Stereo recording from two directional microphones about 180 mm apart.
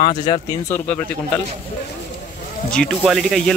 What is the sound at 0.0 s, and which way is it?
Speech, 30° left (ahead or behind).